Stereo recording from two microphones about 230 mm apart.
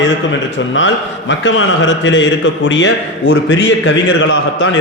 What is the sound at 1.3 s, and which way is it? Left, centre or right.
A man's voice, left.